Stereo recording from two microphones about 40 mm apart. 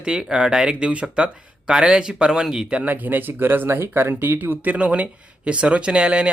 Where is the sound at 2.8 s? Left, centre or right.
Right.